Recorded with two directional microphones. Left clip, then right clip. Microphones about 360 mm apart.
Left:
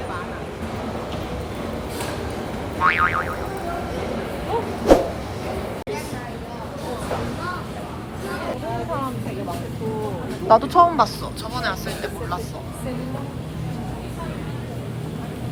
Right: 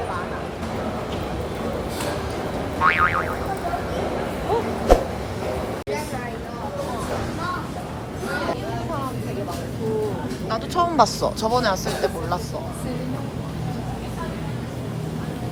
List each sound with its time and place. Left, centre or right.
2.8 s boing: centre
4.9 s a sound: centre
10.5 s speech: centre
10.9 s speech: centre